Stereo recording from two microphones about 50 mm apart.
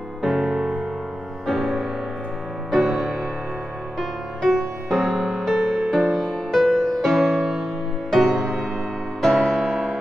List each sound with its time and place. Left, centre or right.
0.2 s music: centre
0.6 s music: centre
1.5 s music: centre
9.2 s music: centre